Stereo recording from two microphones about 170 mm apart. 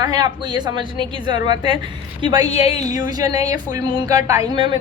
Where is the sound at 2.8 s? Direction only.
20° right (ahead or behind).